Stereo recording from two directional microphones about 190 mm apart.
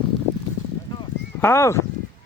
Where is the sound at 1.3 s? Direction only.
15° left (ahead or behind).